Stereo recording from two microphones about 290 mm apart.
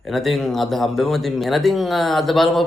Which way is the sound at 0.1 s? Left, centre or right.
Centre.